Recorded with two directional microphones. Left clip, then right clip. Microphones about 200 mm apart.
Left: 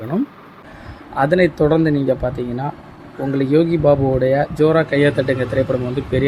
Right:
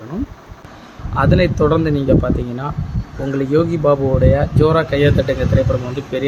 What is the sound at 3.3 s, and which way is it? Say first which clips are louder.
Speech: left 1 dB; centre (ahead or behind).